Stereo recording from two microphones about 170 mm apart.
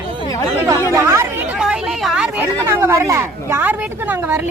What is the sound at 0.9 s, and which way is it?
Speech, 15° right (ahead or behind).